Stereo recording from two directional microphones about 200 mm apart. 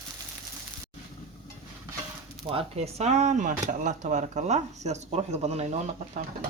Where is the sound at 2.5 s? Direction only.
30° right (ahead or behind).